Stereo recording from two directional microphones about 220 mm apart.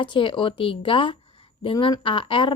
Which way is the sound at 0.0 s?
20° left (ahead or behind).